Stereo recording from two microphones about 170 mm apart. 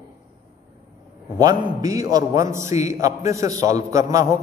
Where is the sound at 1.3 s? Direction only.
20° right (ahead or behind).